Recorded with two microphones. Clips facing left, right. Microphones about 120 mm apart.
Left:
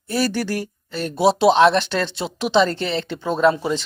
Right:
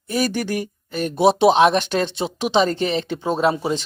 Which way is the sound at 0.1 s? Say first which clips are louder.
Even; 15° right (ahead or behind).